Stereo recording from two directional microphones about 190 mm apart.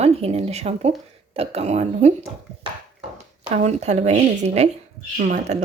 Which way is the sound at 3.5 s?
35° right (ahead or behind).